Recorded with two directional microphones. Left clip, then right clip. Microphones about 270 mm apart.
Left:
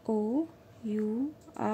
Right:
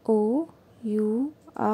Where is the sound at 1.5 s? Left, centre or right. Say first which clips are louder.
Right 6 dB; centre.